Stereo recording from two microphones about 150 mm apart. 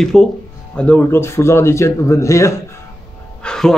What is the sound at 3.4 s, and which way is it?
Music, 5° left (ahead or behind).